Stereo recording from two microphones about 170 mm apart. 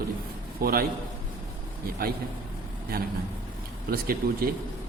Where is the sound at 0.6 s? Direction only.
60° right (ahead or behind).